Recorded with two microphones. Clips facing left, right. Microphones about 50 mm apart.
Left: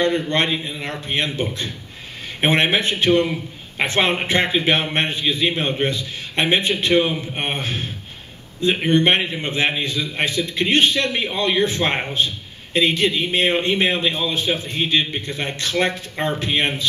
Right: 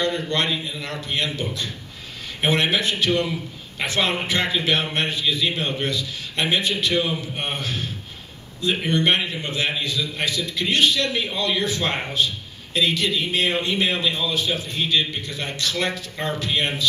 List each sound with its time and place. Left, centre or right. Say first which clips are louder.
0.0 s a man's voice: left 4 dB; left